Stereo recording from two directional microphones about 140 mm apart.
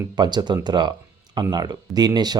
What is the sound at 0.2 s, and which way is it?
Speech, 30° right (ahead or behind).